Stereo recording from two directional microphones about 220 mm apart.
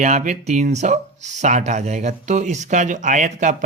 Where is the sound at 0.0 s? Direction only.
35° right (ahead or behind).